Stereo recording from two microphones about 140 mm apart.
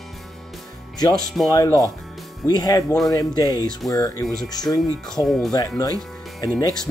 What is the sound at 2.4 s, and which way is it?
Speech, 30° left (ahead or behind).